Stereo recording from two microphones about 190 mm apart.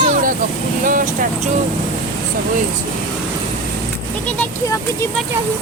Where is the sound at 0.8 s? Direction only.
45° right (ahead or behind).